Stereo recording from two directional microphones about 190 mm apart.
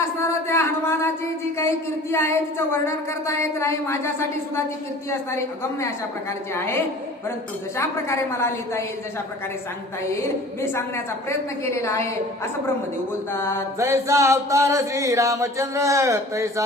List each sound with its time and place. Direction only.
0.0 s a sound: 15° left (ahead or behind)
1.5 s speech: 15° left (ahead or behind)
6.5 s speech: 10° left (ahead or behind)
10.6 s speech: 15° left (ahead or behind)
13.7 s music: 15° right (ahead or behind)